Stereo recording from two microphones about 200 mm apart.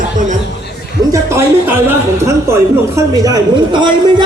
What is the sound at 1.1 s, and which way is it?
Speech, 15° right (ahead or behind).